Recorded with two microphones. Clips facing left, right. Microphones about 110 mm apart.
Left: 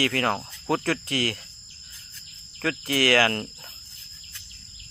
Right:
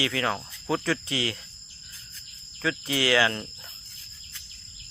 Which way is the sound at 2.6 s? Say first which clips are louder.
Left 2 dB; 60° left (ahead or behind).